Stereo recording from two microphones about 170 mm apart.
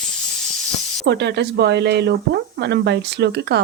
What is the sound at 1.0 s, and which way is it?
Speech, 80° right.